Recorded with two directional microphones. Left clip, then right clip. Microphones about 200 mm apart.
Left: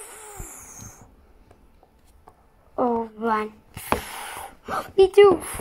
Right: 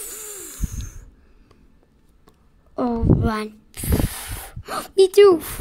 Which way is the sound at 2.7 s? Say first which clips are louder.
Right 1 dB; 35° right (ahead or behind).